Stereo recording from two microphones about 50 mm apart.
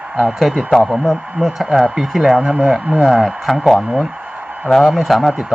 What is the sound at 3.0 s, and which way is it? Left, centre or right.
A man's voice, centre.